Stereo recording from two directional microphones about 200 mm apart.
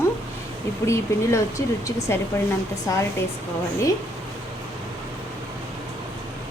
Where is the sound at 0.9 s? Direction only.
15° left (ahead or behind).